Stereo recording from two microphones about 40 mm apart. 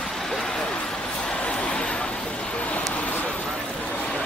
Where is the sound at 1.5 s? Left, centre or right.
Left.